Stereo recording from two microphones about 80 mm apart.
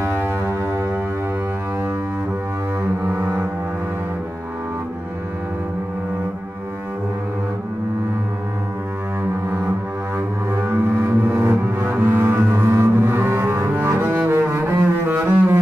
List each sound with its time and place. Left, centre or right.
0.0 s music: right
3.1 s music: right
10.1 s music: right
11.2 s double bass: right